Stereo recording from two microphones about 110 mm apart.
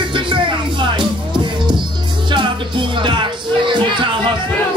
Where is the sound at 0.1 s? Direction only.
50° right (ahead or behind).